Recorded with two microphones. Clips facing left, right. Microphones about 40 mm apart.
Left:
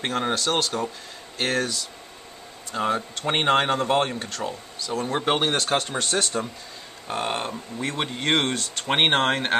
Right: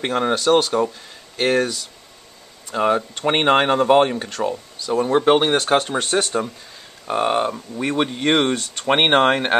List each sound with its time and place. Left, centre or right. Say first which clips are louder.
0.0 s speech: right 5 dB; centre
5.6 s speech: right 6 dB; right